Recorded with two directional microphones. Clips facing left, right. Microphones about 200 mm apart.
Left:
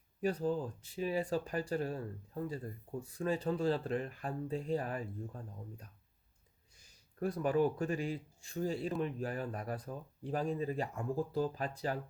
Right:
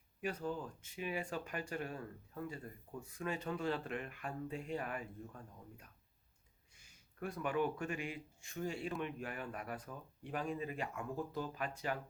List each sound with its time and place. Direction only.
0.2 s speech: 35° left (ahead or behind)